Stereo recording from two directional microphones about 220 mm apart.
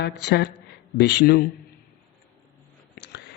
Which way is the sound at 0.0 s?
50° left (ahead or behind).